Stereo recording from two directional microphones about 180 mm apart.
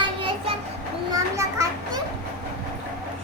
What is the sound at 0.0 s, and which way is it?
Child singing, 30° right (ahead or behind).